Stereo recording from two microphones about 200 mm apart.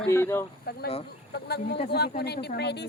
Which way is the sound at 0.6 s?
50° left (ahead or behind).